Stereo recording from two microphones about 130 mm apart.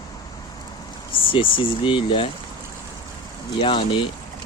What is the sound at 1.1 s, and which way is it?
Speech, 40° left (ahead or behind).